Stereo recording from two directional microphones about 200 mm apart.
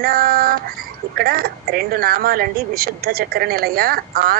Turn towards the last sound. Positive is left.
turn(degrees=-50)  # may be behind; listen again after turning